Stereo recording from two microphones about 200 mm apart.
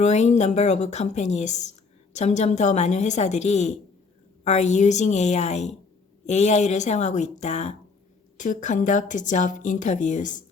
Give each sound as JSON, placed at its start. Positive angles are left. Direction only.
{"t": 0.0, "sound": "speech", "side_deg": 35}